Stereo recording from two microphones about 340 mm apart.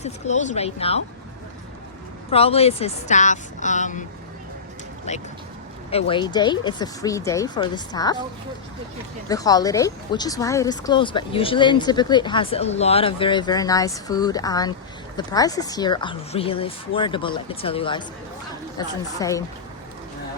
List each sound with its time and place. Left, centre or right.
0.0 s speech: left
2.3 s speech: centre
5.1 s speech: centre
9.3 s speech: centre